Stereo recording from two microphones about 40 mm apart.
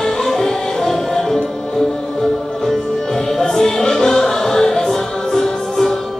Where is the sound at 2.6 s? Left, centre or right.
Centre.